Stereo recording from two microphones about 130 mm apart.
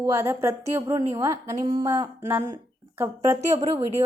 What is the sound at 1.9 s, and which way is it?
A woman's voice, 25° right (ahead or behind).